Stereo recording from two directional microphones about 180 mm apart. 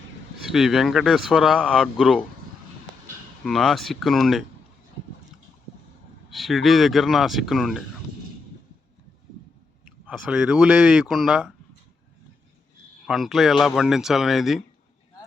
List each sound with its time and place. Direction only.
0.5 s speech: centre (ahead or behind)
3.4 s speech: centre (ahead or behind)
6.3 s speech: centre (ahead or behind)
10.1 s speech: 5° right (ahead or behind)
13.1 s speech: centre (ahead or behind)